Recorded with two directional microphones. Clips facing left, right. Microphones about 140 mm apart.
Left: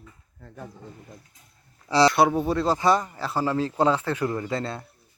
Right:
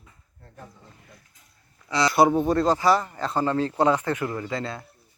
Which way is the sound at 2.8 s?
20° left (ahead or behind).